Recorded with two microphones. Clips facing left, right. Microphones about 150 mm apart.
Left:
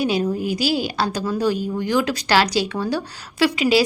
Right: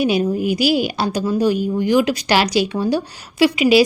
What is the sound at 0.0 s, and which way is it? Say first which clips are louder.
A woman's voice: right 3 dB; 15° right (ahead or behind).